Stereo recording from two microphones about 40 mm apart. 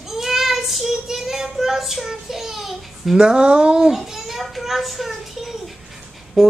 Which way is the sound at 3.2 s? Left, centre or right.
Right.